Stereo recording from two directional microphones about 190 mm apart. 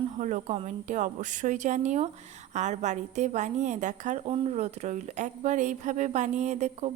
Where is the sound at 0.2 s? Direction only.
40° right (ahead or behind).